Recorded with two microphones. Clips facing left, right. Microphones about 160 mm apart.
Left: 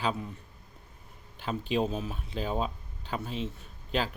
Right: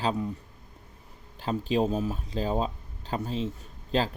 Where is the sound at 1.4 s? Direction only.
35° right (ahead or behind).